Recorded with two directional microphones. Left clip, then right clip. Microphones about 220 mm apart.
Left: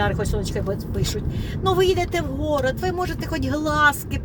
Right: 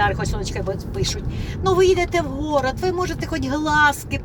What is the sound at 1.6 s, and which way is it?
Speech, 15° left (ahead or behind).